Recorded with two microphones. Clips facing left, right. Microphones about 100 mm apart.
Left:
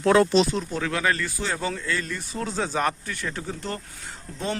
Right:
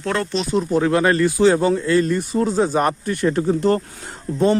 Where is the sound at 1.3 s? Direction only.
65° right (ahead or behind).